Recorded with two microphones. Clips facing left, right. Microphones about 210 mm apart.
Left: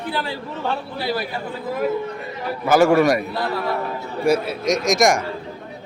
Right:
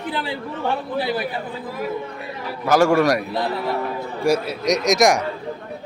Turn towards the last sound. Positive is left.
turn(degrees=0)  # may be behind; listen again after turning